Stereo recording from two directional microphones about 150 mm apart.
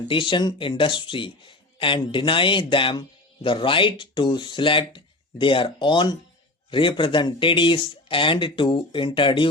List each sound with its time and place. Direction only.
0.1 s speech: 35° left (ahead or behind)